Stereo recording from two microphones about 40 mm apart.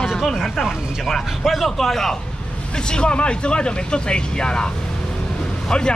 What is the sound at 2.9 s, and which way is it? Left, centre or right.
Speech, left.